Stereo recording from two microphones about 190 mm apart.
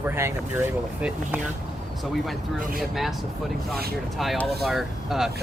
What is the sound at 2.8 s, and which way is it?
Speech, centre (ahead or behind).